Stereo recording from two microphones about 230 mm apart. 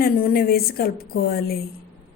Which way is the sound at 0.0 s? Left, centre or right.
Left.